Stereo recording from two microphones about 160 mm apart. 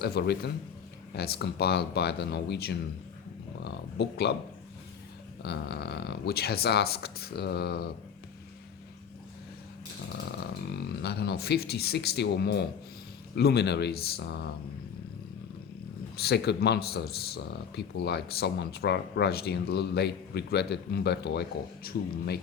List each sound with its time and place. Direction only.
0.0 s speech: 90° left
3.6 s a sound: 90° left
5.4 s speech: 90° left
10.7 s speech: 90° left
16.1 s speech: 90° left
21.9 s speech: 70° left (ahead or behind)